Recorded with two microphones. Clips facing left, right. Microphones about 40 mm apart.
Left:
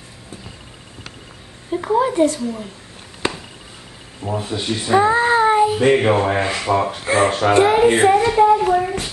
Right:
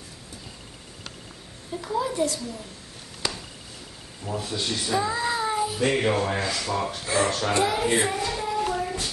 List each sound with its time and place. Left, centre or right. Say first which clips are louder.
1.7 s child singing: left 10 dB; left
3.2 s a sound: left 8 dB; left
4.2 s speech: left 6 dB; left
4.9 s child singing: left 12 dB; left